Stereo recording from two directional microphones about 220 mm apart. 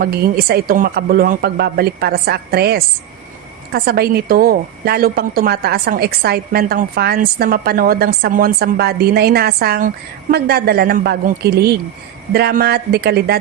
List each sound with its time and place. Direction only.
0.0 s a woman's voice: 45° right (ahead or behind)